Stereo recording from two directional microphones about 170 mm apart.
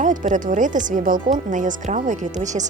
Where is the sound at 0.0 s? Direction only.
45° right (ahead or behind).